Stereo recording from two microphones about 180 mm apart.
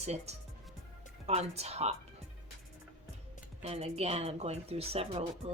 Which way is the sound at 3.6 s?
35° right (ahead or behind).